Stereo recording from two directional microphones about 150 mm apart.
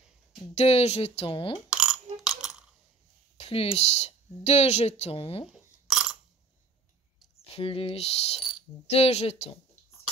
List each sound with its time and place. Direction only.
0.6 s speech: 45° left (ahead or behind)
1.7 s burping: 5° right (ahead or behind)
3.3 s speech: 40° left (ahead or behind)
5.5 s a sound: centre (ahead or behind)
7.5 s speech: 40° left (ahead or behind)